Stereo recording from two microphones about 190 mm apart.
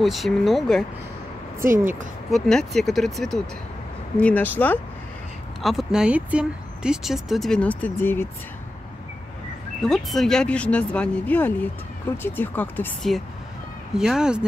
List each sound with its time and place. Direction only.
0.0 s speech: centre (ahead or behind)
1.7 s speech: 45° right (ahead or behind)
2.3 s speech: centre (ahead or behind)
9.8 s speech: centre (ahead or behind)